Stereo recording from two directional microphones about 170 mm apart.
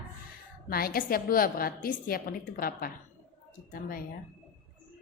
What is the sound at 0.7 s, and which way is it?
A woman's voice, 60° left (ahead or behind).